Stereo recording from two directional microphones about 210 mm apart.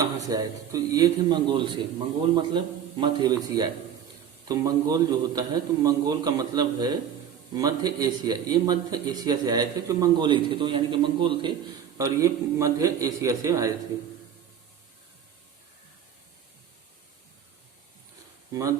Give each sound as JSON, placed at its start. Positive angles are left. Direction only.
{"t": 0.0, "sound": "a man's voice", "side_deg": -15}